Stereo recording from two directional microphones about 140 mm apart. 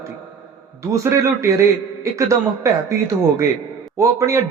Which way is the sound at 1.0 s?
20° right (ahead or behind).